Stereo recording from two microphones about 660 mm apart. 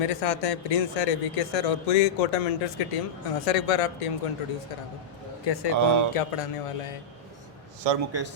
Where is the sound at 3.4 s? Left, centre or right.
Left.